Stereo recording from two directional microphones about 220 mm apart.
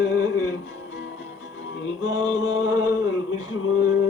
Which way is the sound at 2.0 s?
55° left (ahead or behind).